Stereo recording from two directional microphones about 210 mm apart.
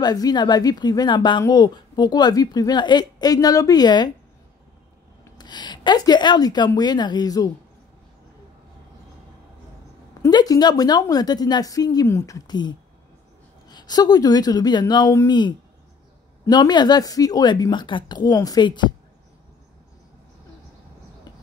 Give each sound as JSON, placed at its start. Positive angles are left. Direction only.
{"t": 0.0, "sound": "a woman's voice", "side_deg": 20}
{"t": 5.2, "sound": "a woman's voice", "side_deg": 20}
{"t": 10.2, "sound": "a woman's voice", "side_deg": 15}